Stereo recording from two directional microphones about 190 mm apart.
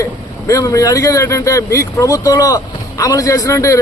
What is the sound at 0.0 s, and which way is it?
A man's voice, 15° left (ahead or behind).